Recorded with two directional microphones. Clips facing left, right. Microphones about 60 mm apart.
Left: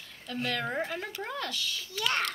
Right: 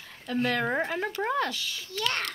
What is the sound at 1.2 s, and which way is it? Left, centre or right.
Speech, right.